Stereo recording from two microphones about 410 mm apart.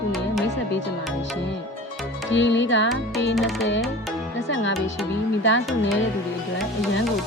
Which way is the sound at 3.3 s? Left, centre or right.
Centre.